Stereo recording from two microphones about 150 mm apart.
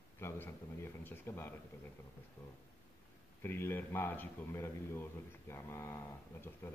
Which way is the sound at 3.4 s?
15° left (ahead or behind).